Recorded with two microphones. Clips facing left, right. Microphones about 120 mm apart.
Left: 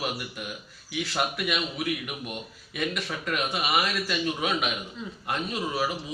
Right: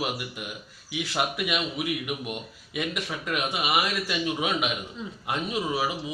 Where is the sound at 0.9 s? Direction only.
10° right (ahead or behind).